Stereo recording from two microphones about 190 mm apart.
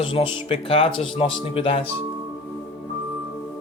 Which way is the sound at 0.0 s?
30° left (ahead or behind).